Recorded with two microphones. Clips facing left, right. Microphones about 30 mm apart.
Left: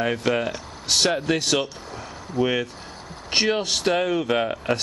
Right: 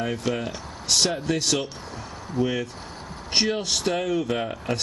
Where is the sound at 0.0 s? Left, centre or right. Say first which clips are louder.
Left 4 dB; left.